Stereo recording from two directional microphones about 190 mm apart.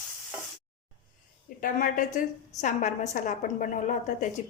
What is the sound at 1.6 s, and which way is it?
A woman's voice, 45° left (ahead or behind).